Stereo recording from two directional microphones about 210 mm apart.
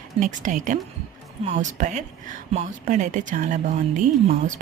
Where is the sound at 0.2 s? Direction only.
35° right (ahead or behind).